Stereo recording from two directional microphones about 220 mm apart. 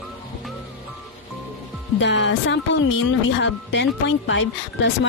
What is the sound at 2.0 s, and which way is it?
Speech, 55° left (ahead or behind).